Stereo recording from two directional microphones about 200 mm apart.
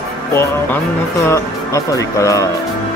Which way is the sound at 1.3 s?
15° left (ahead or behind).